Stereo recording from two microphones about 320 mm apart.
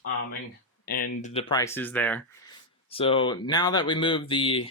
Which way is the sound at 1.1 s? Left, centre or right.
Left.